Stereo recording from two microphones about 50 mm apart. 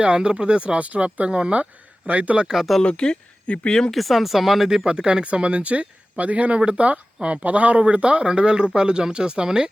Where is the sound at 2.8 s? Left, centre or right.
Centre.